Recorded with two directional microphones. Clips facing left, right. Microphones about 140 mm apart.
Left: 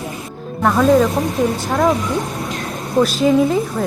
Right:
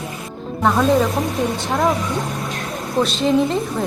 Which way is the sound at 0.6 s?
Centre (ahead or behind).